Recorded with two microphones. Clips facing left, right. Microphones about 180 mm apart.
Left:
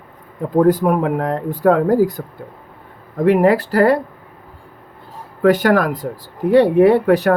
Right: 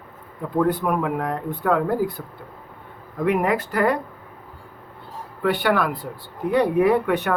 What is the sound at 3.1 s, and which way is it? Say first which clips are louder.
Speech: left 8 dB; 35° left (ahead or behind).